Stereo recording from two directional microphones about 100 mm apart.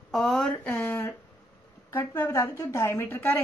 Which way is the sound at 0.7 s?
20° left (ahead or behind).